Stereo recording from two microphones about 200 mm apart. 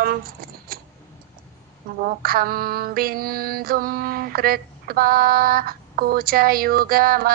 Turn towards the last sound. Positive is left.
turn(degrees=-50)  # may be behind; listen again after turning